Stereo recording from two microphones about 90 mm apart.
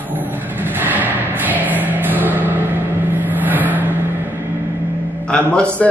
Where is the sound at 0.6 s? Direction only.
20° right (ahead or behind).